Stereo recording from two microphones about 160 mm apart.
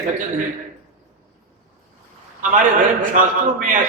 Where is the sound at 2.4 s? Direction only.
55° right (ahead or behind).